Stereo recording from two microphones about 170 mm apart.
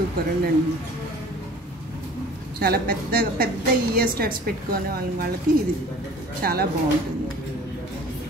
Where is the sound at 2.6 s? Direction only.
60° right (ahead or behind).